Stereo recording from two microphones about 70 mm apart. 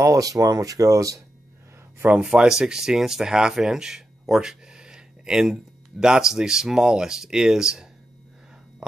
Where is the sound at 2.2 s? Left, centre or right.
Centre.